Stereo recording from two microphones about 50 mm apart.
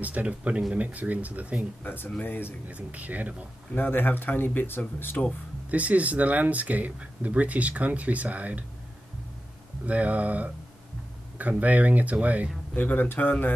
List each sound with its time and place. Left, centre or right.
0.0 s speech: right
1.8 s speech: left
2.7 s speech: right
3.7 s speech: left
5.7 s speech: right
9.8 s speech: right
12.7 s speech: left